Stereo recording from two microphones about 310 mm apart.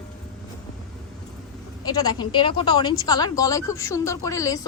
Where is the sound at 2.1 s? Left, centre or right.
Centre.